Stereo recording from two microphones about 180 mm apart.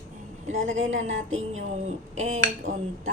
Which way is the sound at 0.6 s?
90° right.